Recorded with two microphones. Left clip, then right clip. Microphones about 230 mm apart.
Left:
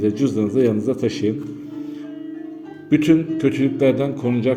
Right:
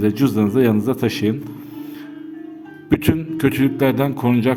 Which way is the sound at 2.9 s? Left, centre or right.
Right.